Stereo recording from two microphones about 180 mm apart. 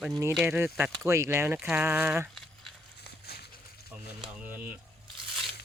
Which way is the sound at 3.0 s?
65° left (ahead or behind).